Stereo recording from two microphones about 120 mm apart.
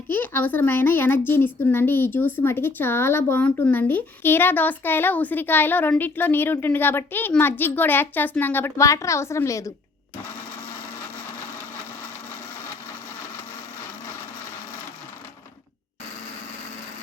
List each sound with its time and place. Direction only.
0.1 s speech: 15° left (ahead or behind)